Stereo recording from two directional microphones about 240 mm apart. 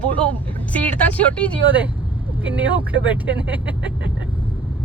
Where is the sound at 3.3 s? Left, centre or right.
Centre.